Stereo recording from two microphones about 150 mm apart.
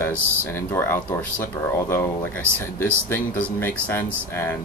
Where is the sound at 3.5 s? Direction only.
15° left (ahead or behind).